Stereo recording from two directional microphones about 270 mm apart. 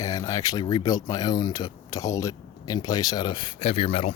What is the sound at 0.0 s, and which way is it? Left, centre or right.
Speech, centre.